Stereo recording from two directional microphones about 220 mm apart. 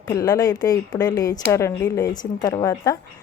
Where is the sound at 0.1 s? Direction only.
15° left (ahead or behind).